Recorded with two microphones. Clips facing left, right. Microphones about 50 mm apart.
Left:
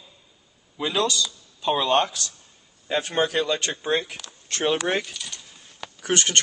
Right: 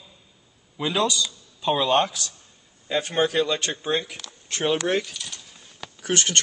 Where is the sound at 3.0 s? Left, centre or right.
Left.